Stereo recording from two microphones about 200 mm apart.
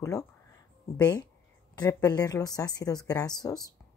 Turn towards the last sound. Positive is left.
turn(degrees=20)  # may be behind; listen again after turning